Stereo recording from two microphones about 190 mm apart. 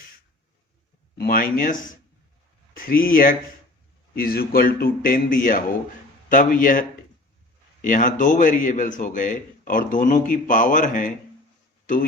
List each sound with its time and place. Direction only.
1.2 s a man's voice: 50° left (ahead or behind)